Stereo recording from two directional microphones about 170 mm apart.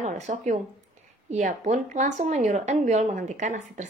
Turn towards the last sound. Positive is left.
turn(degrees=-45)  # may be behind; listen again after turning